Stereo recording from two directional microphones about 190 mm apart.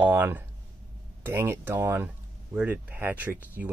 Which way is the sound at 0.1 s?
10° right (ahead or behind).